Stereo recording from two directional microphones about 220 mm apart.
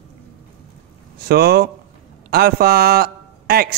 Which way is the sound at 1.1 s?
45° right (ahead or behind).